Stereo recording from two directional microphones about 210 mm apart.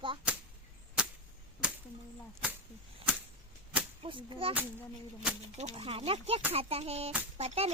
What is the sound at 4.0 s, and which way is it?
Speech, 25° right (ahead or behind).